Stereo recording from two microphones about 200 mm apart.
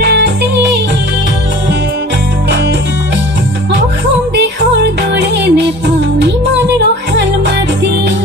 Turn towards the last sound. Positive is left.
turn(degrees=-60)  # may be behind; listen again after turning